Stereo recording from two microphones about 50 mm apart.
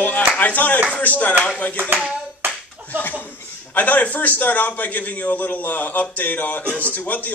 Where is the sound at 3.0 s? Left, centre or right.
Left.